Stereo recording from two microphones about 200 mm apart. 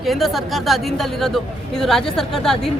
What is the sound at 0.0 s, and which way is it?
Speech, centre (ahead or behind).